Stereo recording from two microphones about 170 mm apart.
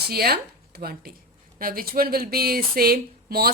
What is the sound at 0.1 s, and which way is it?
Speech, 65° right (ahead or behind).